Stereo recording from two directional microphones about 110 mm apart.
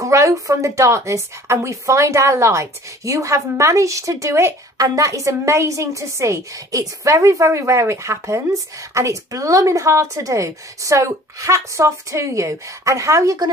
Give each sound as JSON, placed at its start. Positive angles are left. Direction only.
{"t": 0.0, "sound": "a woman's voice", "side_deg": -30}